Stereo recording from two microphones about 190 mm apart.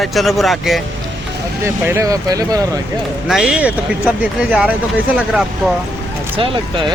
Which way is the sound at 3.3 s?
5° right (ahead or behind).